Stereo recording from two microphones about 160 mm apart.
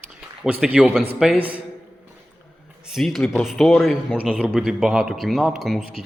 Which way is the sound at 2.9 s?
Centre (ahead or behind).